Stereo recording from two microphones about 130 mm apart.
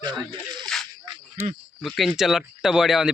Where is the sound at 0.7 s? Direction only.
5° left (ahead or behind).